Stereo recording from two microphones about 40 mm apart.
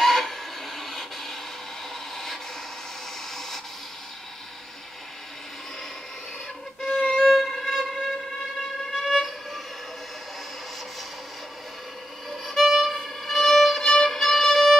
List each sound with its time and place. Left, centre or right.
0.0 s a sound: centre
3.3 s a sound: centre
6.9 s violin: left
7.2 s violin: centre
8.9 s train: centre
12.3 s violin: centre